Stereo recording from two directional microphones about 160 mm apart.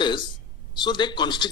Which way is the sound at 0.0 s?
30° left (ahead or behind).